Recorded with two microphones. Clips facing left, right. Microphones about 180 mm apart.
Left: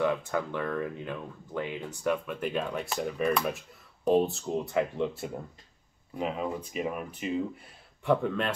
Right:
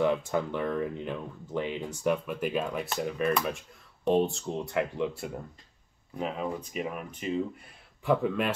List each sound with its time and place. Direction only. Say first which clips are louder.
0.0 s speech: right 2 dB; 20° right (ahead or behind)
2.0 s speech: right 1 dB; 5° right (ahead or behind)